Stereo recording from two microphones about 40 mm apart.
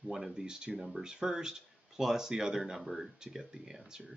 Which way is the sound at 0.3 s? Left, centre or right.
Centre.